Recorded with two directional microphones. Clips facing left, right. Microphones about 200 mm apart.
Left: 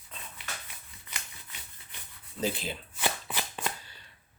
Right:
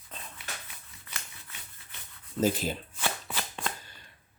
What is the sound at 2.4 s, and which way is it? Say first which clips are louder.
Speech: right 5 dB; 45° right (ahead or behind).